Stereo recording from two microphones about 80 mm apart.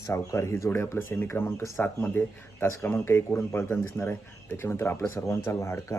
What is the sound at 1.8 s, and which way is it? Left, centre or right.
Speech, left.